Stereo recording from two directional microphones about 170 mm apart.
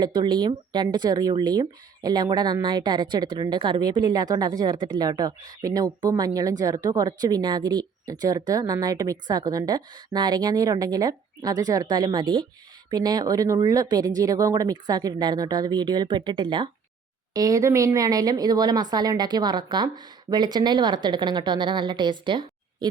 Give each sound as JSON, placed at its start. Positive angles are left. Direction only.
{"t": 0.0, "sound": "speech", "side_deg": -25}